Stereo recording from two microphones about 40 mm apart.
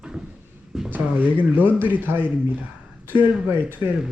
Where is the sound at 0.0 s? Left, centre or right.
Centre.